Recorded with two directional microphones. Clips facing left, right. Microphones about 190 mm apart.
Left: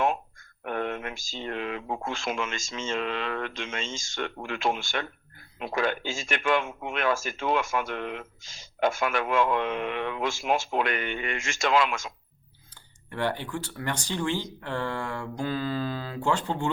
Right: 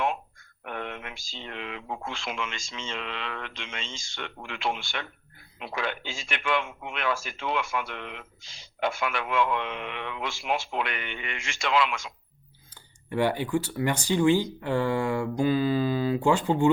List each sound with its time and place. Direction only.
0.6 s speech: 45° left (ahead or behind)
13.1 s speech: 10° right (ahead or behind)